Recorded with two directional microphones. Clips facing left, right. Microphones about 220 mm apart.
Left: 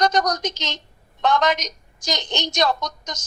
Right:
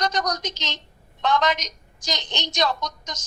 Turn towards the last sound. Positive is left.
turn(degrees=50)  # may be behind; listen again after turning